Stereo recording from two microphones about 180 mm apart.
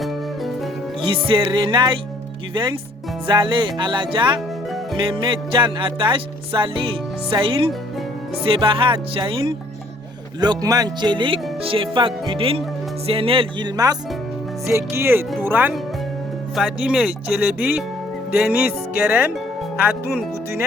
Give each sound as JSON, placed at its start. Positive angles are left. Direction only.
{"t": 1.0, "sound": "music", "side_deg": -30}
{"t": 3.2, "sound": "music", "side_deg": -25}
{"t": 10.4, "sound": "music", "side_deg": -20}
{"t": 14.7, "sound": "speech", "side_deg": -15}